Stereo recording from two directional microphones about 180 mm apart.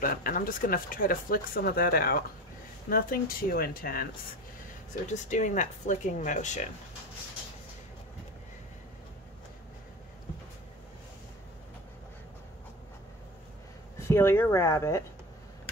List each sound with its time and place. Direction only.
0.0 s speech: 50° left (ahead or behind)
5.1 s speech: 45° left (ahead or behind)
14.0 s speech: 15° left (ahead or behind)